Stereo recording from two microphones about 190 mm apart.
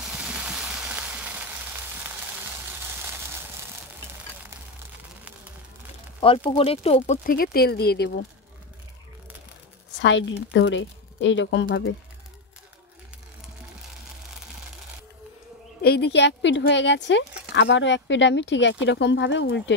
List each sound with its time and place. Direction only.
0.0 s a sound: 5° right (ahead or behind)
6.2 s speech: 30° left (ahead or behind)
7.1 s speech: 50° left (ahead or behind)
9.9 s speech: 75° left (ahead or behind)
15.8 s speech: 60° left (ahead or behind)